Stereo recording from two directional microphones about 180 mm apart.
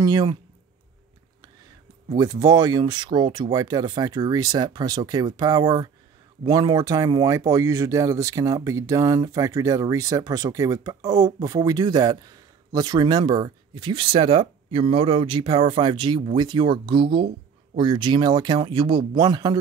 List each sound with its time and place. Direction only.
0.0 s speech: 20° right (ahead or behind)
2.1 s speech: 20° right (ahead or behind)